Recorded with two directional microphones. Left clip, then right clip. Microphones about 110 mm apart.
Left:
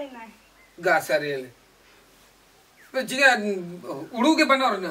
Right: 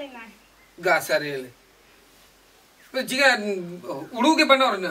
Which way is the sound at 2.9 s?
5° right (ahead or behind).